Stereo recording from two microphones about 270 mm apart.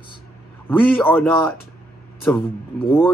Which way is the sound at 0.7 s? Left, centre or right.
Centre.